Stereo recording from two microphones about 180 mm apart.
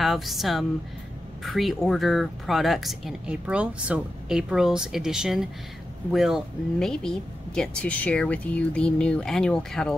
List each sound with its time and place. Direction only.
0.0 s speech: centre (ahead or behind)